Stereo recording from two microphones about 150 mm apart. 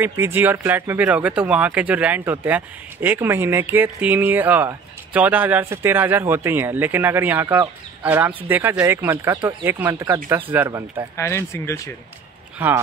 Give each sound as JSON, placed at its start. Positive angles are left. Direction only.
{"t": 0.0, "sound": "speech", "side_deg": -15}
{"t": 11.1, "sound": "speech", "side_deg": 15}
{"t": 12.6, "sound": "speech", "side_deg": -15}